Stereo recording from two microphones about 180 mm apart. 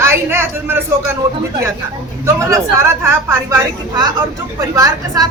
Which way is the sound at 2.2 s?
15° right (ahead or behind).